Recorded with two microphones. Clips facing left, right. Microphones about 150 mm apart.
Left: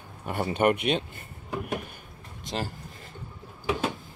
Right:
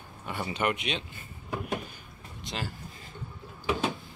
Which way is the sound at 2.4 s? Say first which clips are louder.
Left 4 dB; 45° left (ahead or behind).